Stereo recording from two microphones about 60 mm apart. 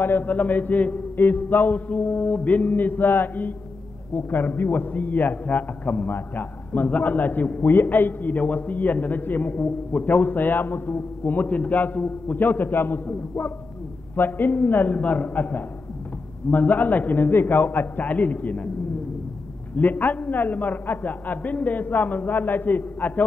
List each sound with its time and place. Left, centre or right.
0.0 s mantra: left
4.1 s a man's voice: left
19.7 s a man's voice: left